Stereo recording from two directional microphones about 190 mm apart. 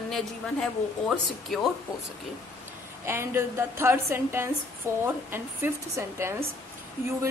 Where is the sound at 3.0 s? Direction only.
10° right (ahead or behind).